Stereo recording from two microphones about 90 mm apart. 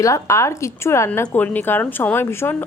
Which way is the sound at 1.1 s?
20° left (ahead or behind).